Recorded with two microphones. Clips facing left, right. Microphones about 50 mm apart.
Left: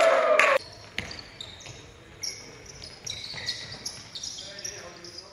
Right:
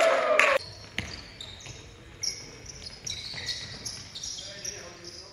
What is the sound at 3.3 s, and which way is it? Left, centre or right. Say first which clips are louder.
Basketball bounce: left 1 dB; centre.